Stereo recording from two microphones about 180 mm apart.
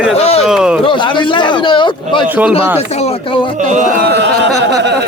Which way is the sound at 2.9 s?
35° left (ahead or behind).